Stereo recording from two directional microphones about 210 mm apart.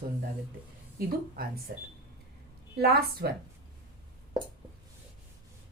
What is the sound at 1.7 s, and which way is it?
A woman's voice, 50° right (ahead or behind).